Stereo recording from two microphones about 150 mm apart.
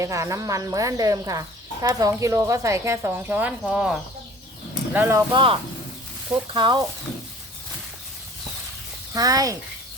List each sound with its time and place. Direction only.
0.0 s speech: 20° right (ahead or behind)
4.9 s speech: 15° right (ahead or behind)
5.3 s speech: 35° right (ahead or behind)
9.1 s speech: 25° right (ahead or behind)